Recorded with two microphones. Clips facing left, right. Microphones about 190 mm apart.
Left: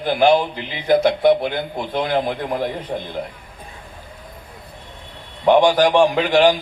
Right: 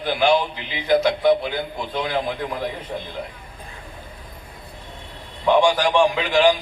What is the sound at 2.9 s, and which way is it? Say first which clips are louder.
Speech: left 4 dB; 40° left (ahead or behind).